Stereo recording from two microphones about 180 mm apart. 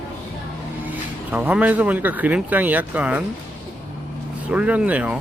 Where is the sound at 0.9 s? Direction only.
10° right (ahead or behind).